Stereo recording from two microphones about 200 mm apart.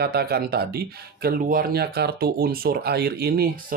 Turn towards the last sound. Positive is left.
turn(degrees=-50)  # may be behind; listen again after turning